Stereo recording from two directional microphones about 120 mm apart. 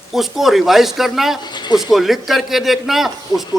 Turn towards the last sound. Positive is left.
turn(degrees=0)  # may be behind; listen again after turning